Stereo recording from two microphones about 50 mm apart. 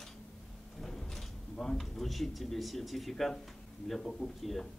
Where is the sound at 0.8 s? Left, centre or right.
Centre.